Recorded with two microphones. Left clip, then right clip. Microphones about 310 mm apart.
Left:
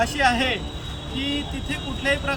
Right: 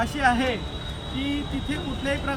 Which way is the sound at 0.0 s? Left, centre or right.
Centre.